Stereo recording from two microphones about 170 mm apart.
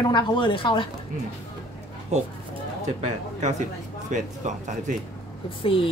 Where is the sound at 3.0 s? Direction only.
45° right (ahead or behind).